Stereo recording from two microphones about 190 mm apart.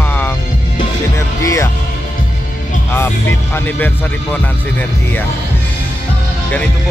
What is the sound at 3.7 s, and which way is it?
Speech, 10° left (ahead or behind).